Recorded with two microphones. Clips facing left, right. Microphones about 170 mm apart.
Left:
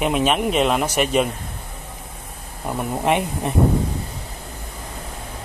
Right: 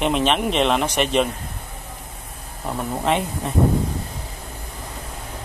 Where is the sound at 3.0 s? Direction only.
15° left (ahead or behind).